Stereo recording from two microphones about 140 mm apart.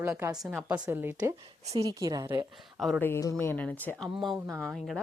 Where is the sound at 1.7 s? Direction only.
25° right (ahead or behind).